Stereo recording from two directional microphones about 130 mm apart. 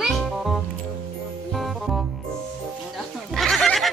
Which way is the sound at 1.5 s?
Centre (ahead or behind).